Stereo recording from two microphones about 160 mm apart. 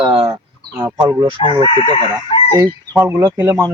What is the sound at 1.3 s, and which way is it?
Speech, 30° right (ahead or behind).